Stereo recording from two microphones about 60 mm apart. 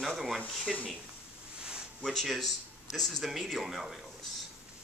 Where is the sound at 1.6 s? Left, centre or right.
Centre.